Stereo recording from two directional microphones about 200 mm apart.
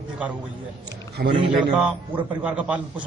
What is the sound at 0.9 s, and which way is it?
Speech, 55° right (ahead or behind).